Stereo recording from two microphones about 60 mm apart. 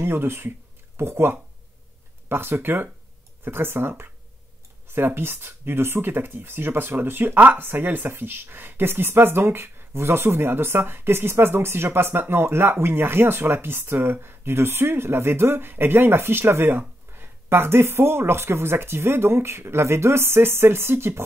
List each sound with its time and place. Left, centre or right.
0.0 s speech: right